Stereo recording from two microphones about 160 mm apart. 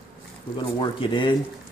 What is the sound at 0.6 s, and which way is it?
Speech, 30° left (ahead or behind).